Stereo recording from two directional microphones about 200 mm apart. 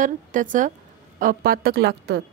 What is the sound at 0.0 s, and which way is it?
A woman's voice, 40° right (ahead or behind).